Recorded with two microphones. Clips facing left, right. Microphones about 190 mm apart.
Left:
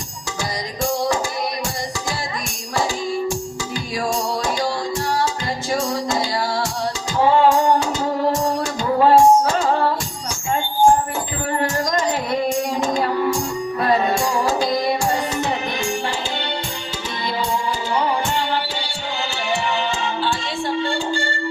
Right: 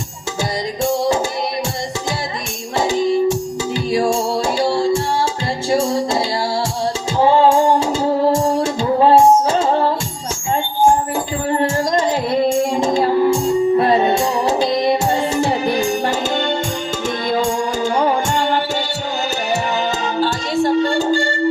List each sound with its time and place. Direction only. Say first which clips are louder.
0.8 s music: right 3 dB; 25° right (ahead or behind)
2.7 s music: right 6 dB; 25° right (ahead or behind)
11.5 s music: right 4 dB; 25° right (ahead or behind)
17.2 s music: right 4 dB; 45° right (ahead or behind)
19.7 s music: right 4 dB; 40° right (ahead or behind)